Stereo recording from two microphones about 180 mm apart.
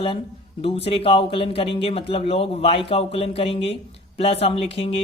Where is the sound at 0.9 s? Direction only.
30° left (ahead or behind).